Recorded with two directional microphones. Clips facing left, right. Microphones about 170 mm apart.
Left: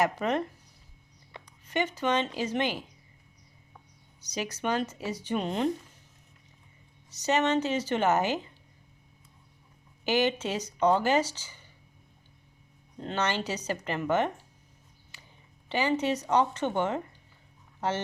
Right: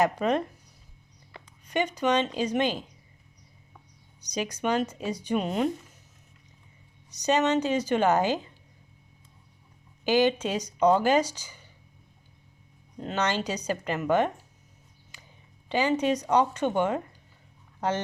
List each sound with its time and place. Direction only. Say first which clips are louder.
0.0 s speech: right 3 dB; 20° right (ahead or behind)
1.6 s speech: right 3 dB; 15° right (ahead or behind)
4.2 s speech: right 3 dB; 15° right (ahead or behind)
7.2 s speech: right 2 dB; 15° right (ahead or behind)
10.1 s speech: right 4 dB; 15° right (ahead or behind)
13.0 s speech: right 2 dB; 10° right (ahead or behind)
15.7 s speech: right 3 dB; 15° right (ahead or behind)